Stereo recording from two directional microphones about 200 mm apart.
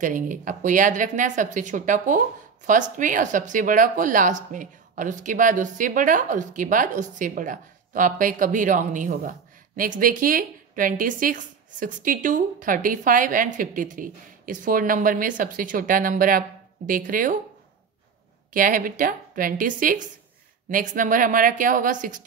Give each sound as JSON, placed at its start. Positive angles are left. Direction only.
{"t": 0.0, "sound": "a woman's voice", "side_deg": -40}
{"t": 18.5, "sound": "a woman's voice", "side_deg": -45}